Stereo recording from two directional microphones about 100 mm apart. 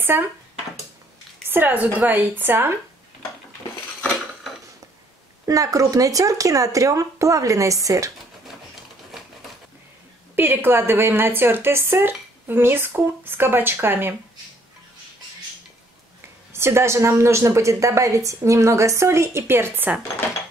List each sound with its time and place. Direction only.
0.1 s speech: 20° right (ahead or behind)
1.5 s speech: 20° right (ahead or behind)
5.5 s speech: 35° right (ahead or behind)
10.3 s speech: 20° right (ahead or behind)
16.5 s speech: 25° right (ahead or behind)